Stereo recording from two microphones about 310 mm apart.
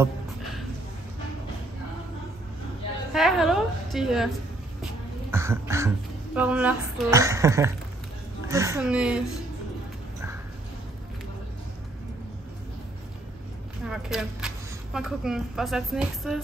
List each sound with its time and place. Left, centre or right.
3.1 s a sound: centre
5.3 s a woman's voice: centre
13.8 s a woman's voice: centre